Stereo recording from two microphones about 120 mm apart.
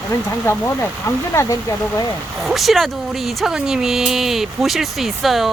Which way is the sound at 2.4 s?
Centre (ahead or behind).